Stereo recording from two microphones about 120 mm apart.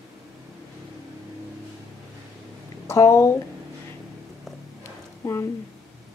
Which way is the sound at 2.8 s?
25° left (ahead or behind).